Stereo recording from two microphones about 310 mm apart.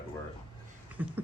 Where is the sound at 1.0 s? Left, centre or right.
Centre.